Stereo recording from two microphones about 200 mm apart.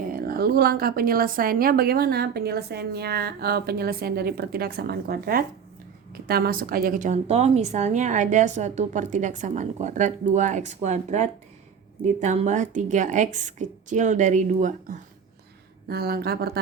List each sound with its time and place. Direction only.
0.1 s a woman's voice: 45° right (ahead or behind)
15.9 s a woman's voice: 50° right (ahead or behind)